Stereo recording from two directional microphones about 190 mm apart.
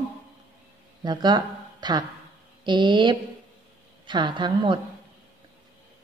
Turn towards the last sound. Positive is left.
turn(degrees=-25)  # may be behind; listen again after turning